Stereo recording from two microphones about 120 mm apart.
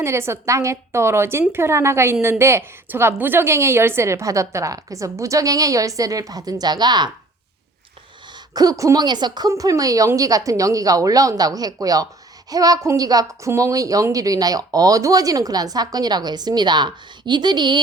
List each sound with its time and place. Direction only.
0.0 s a woman's voice: 20° right (ahead or behind)
8.5 s a woman's voice: 30° right (ahead or behind)